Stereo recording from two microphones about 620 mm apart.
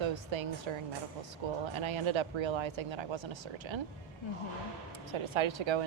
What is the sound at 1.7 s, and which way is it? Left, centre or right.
Speech, right.